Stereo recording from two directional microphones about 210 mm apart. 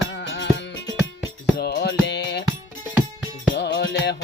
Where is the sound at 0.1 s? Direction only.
60° left (ahead or behind).